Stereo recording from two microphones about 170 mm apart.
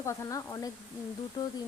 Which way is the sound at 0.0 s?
20° left (ahead or behind).